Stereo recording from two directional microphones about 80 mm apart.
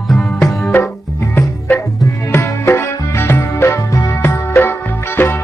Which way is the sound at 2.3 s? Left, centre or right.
Left.